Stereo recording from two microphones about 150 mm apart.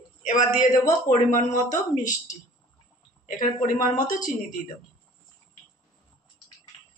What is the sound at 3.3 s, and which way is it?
Speech, 60° left (ahead or behind).